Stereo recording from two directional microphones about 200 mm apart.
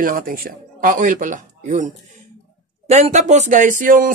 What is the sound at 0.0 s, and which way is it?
Speech, 45° right (ahead or behind).